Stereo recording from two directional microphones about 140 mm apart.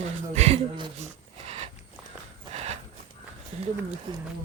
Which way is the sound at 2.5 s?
45° right (ahead or behind).